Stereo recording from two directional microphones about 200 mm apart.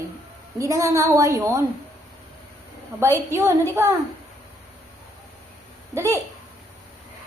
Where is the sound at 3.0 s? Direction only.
15° right (ahead or behind).